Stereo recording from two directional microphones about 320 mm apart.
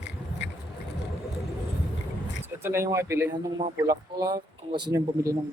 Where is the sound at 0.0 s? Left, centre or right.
Left.